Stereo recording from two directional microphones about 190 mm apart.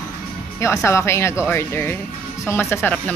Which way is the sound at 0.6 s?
15° left (ahead or behind).